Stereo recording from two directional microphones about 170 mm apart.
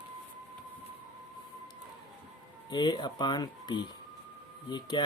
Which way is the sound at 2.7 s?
25° left (ahead or behind).